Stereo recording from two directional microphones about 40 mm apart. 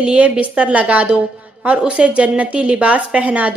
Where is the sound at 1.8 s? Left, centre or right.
Right.